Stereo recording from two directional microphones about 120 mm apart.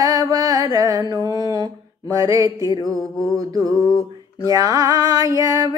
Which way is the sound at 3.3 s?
30° right (ahead or behind).